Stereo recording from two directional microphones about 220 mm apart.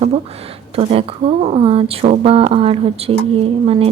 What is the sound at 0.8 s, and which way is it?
Speech, 25° right (ahead or behind).